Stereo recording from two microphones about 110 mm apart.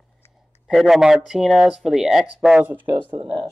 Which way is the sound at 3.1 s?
50° right (ahead or behind).